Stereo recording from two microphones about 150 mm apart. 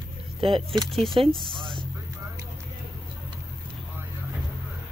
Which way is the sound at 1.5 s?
35° right (ahead or behind).